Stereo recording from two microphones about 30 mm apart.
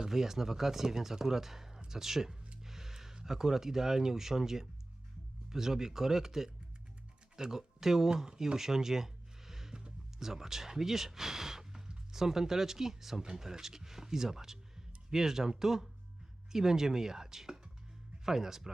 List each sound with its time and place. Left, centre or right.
0.1 s speech: centre
2.6 s music: centre
3.2 s speech: centre
8.5 s a sound: centre
10.2 s speech: centre